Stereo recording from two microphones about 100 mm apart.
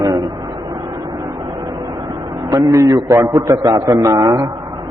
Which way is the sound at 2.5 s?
30° right (ahead or behind).